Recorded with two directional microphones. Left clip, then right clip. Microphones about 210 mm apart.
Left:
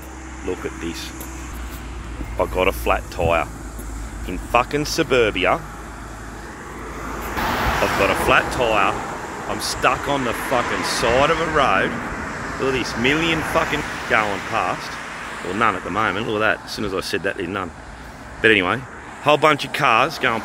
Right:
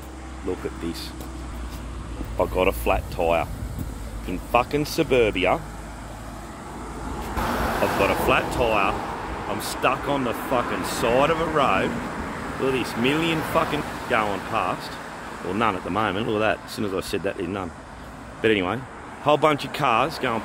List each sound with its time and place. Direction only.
2.3 s speech: centre (ahead or behind)
7.3 s vehicle: 45° right (ahead or behind)
8.0 s speech: centre (ahead or behind)
15.6 s speech: 10° right (ahead or behind)